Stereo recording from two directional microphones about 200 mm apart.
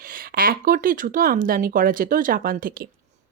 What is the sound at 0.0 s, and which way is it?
Speech, 45° right (ahead or behind).